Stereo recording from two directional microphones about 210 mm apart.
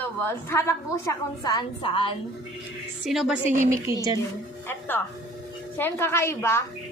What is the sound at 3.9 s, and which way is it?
Speech, 15° right (ahead or behind).